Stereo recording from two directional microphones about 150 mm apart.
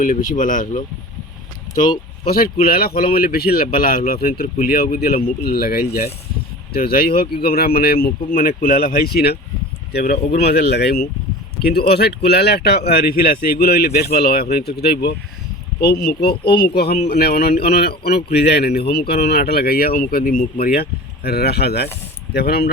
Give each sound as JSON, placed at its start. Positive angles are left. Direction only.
{"t": 0.0, "sound": "speech", "side_deg": 60}
{"t": 2.3, "sound": "speech", "side_deg": 80}
{"t": 8.3, "sound": "speech", "side_deg": 75}
{"t": 21.2, "sound": "speech", "side_deg": 90}